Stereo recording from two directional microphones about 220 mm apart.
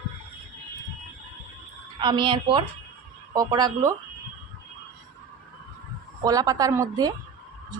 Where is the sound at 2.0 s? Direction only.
20° right (ahead or behind).